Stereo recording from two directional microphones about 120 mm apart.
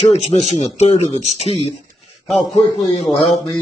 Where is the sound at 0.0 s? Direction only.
60° left (ahead or behind).